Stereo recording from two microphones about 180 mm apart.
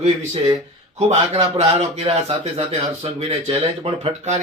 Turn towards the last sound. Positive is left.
turn(degrees=-35)  # may be behind; listen again after turning